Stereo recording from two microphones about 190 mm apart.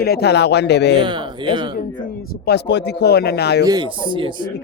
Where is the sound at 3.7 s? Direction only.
25° right (ahead or behind).